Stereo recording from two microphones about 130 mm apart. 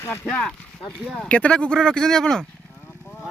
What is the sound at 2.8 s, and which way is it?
Vehicle, 15° left (ahead or behind).